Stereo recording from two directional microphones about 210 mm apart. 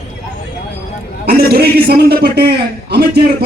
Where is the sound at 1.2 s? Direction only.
50° right (ahead or behind).